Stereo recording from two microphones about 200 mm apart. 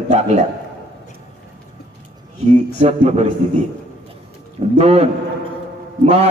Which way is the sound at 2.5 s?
30° right (ahead or behind).